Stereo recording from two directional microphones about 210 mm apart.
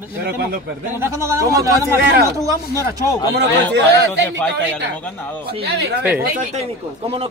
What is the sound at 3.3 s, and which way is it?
Speech, 55° right (ahead or behind).